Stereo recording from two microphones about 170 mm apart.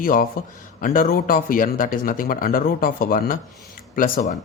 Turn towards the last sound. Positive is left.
turn(degrees=50)  # may be behind; listen again after turning